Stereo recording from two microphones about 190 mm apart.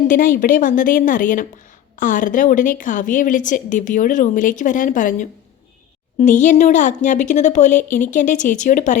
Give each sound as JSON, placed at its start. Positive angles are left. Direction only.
{"t": 0.1, "sound": "a woman's voice", "side_deg": 45}